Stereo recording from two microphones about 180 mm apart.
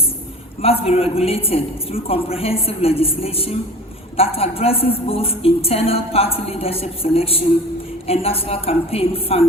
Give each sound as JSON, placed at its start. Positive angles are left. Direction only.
{"t": 0.6, "sound": "a woman's voice", "side_deg": 35}